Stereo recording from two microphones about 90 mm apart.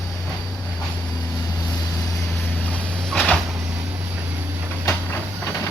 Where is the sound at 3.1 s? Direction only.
Centre (ahead or behind).